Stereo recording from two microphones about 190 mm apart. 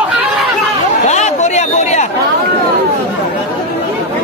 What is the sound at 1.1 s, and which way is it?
Speech, 35° left (ahead or behind).